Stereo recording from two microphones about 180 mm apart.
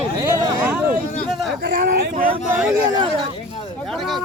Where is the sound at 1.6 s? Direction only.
50° right (ahead or behind).